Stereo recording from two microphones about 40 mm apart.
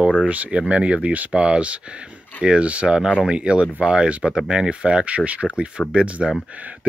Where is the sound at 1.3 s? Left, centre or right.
Right.